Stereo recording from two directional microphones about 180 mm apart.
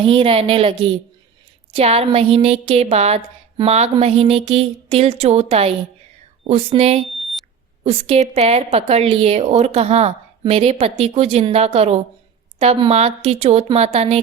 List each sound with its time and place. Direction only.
0.0 s a woman's voice: 30° right (ahead or behind)
7.2 s smoke detector: centre (ahead or behind)
7.9 s a woman's voice: 30° right (ahead or behind)